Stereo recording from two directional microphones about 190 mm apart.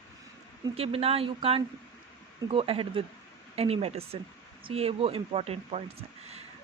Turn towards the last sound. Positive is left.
turn(degrees=-30)  # may be behind; listen again after turning